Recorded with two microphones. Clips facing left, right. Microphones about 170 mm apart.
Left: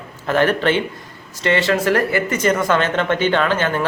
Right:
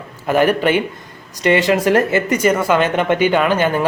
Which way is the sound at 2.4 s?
10° right (ahead or behind).